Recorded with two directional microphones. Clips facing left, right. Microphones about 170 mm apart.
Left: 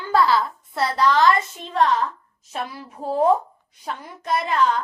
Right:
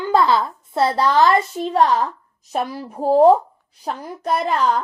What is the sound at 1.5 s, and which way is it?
A woman's voice, 40° right (ahead or behind).